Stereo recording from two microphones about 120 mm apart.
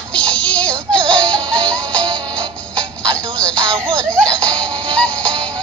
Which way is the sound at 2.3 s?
10° left (ahead or behind).